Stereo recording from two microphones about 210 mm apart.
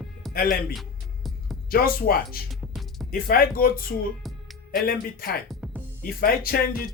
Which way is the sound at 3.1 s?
45° left (ahead or behind).